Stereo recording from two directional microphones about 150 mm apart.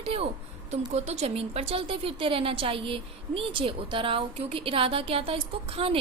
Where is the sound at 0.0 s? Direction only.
40° right (ahead or behind).